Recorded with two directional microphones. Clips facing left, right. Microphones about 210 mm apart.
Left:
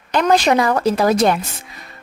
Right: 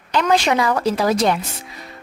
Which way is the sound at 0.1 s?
45° left (ahead or behind).